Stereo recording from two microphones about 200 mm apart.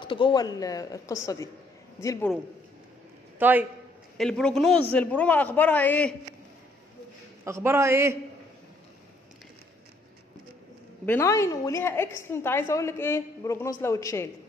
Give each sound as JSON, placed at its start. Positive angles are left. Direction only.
{"t": 0.0, "sound": "a woman's voice", "side_deg": 25}
{"t": 3.3, "sound": "a man's voice", "side_deg": -10}
{"t": 4.2, "sound": "a man's voice", "side_deg": 5}
{"t": 7.4, "sound": "a man's voice", "side_deg": -15}
{"t": 11.1, "sound": "a woman's voice", "side_deg": 15}